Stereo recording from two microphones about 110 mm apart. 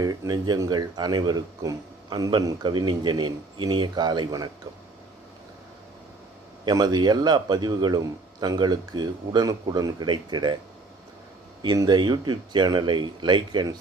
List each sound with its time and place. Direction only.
0.0 s speech: 35° right (ahead or behind)
6.7 s speech: 40° right (ahead or behind)
11.6 s speech: 40° right (ahead or behind)